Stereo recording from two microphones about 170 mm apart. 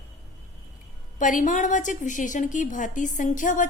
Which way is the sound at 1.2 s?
50° left (ahead or behind).